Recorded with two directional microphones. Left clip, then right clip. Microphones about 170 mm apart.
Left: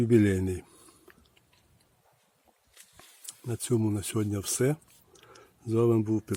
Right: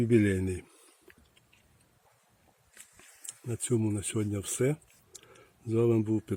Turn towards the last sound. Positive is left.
turn(degrees=5)  # may be behind; listen again after turning